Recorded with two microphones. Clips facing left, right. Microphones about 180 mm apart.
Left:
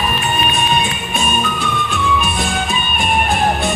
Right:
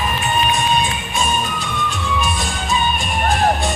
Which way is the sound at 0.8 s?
60° left (ahead or behind).